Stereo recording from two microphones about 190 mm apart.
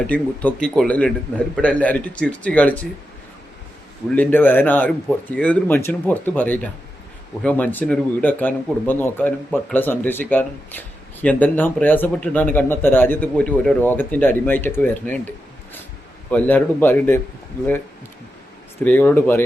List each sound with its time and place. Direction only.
0.1 s speech: 5° left (ahead or behind)
4.1 s speech: 10° left (ahead or behind)
16.3 s speech: 10° left (ahead or behind)
18.8 s speech: 10° left (ahead or behind)